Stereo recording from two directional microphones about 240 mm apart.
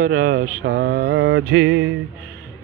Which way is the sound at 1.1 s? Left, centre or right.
Right.